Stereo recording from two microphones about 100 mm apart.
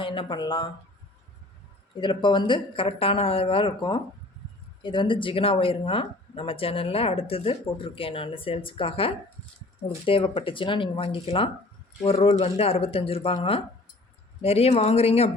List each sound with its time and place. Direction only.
0.0 s speech: 55° left (ahead or behind)
2.0 s speech: 55° left (ahead or behind)
12.0 s speech: 80° left
14.4 s speech: 90° left